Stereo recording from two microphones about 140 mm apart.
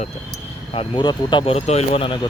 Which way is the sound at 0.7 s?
35° left (ahead or behind).